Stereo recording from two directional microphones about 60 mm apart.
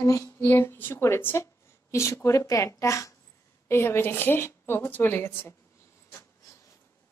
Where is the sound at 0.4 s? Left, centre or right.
Left.